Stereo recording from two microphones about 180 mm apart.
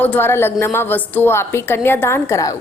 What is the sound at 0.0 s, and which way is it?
A woman's voice, 10° left (ahead or behind).